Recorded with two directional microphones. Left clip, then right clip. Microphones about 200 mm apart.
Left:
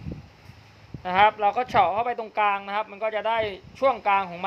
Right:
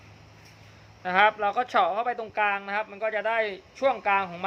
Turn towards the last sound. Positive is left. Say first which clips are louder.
# left 2 dB
turn(degrees=15)  # may be behind; listen again after turning